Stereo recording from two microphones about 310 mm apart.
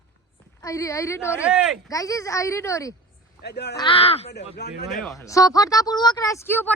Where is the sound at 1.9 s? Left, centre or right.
Centre.